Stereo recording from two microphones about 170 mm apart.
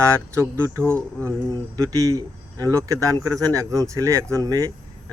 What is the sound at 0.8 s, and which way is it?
Speech, 10° left (ahead or behind).